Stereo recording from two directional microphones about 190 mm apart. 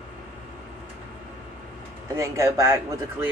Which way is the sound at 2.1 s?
15° right (ahead or behind).